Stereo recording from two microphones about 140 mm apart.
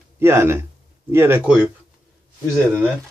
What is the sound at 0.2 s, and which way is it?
Speech, 20° right (ahead or behind).